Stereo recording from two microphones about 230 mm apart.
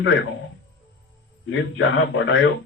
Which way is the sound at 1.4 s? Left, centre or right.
Left.